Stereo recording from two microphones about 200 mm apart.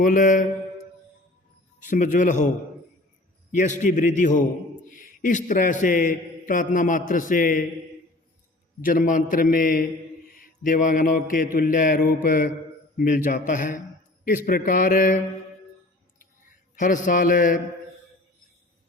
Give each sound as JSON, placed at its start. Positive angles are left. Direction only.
{"t": 0.0, "sound": "a man's voice", "side_deg": 40}
{"t": 1.8, "sound": "a man's voice", "side_deg": 40}
{"t": 3.5, "sound": "a man's voice", "side_deg": 40}
{"t": 8.8, "sound": "mantra", "side_deg": 40}
{"t": 13.0, "sound": "a man's voice", "side_deg": 40}
{"t": 14.3, "sound": "mantra", "side_deg": 45}
{"t": 16.7, "sound": "a man's voice", "side_deg": 40}